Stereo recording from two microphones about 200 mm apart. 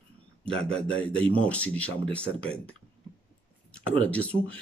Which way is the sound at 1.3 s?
5° left (ahead or behind).